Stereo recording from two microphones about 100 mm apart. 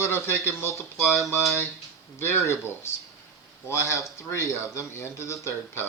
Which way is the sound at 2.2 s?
30° left (ahead or behind).